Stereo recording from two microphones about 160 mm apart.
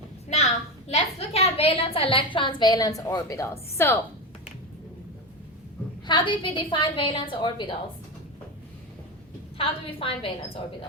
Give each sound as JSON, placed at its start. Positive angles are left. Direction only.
{"t": 0.3, "sound": "a sound", "side_deg": 45}
{"t": 0.9, "sound": "a woman's voice", "side_deg": 40}
{"t": 6.1, "sound": "a woman's voice", "side_deg": 30}
{"t": 9.6, "sound": "a woman's voice", "side_deg": 35}